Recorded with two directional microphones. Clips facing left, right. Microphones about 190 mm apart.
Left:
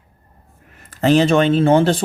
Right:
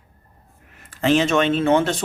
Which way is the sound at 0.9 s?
40° left (ahead or behind).